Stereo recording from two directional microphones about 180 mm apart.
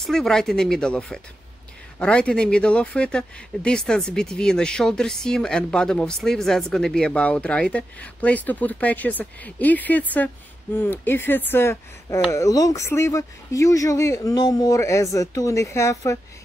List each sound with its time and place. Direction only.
0.0 s speech: centre (ahead or behind)